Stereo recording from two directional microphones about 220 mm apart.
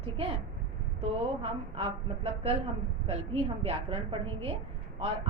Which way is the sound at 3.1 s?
25° right (ahead or behind).